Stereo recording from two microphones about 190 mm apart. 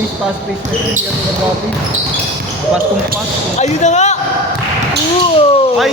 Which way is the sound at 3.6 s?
35° left (ahead or behind).